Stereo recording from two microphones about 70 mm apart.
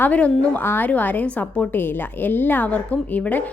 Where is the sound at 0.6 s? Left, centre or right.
Left.